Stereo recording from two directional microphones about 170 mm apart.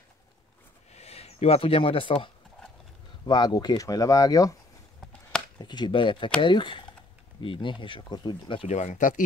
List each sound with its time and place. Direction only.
0.9 s speech: 40° left (ahead or behind); by 4.6 s 20° left (ahead or behind)
5.6 s speech: 25° left (ahead or behind)
8.6 s speech: 45° left (ahead or behind)